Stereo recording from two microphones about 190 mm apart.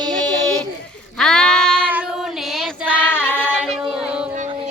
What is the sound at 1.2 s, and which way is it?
Child singing, 5° left (ahead or behind).